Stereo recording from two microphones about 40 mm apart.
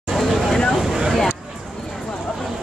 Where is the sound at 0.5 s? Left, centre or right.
Centre.